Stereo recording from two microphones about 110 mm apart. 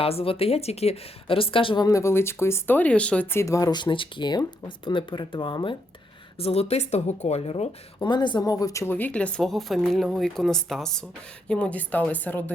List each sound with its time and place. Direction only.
0.0 s speech: 60° left (ahead or behind)
1.8 s speech: 30° left (ahead or behind); by 3.2 s 10° left (ahead or behind)
3.3 s speech: 30° left (ahead or behind); by 5.7 s 45° left (ahead or behind)
6.4 s speech: 70° left (ahead or behind)
7.9 s speech: 45° left (ahead or behind)
8.9 s speech: 15° left (ahead or behind)